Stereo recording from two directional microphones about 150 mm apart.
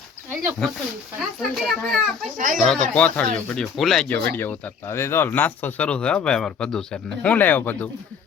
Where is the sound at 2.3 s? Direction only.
60° right (ahead or behind).